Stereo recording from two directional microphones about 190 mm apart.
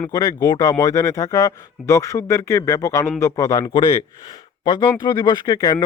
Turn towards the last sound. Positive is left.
turn(degrees=20)  # may be behind; listen again after turning